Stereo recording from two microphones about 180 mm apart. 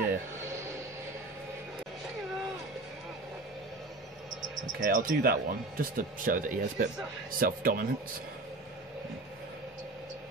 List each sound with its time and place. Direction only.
4.8 s speech: 50° right (ahead or behind)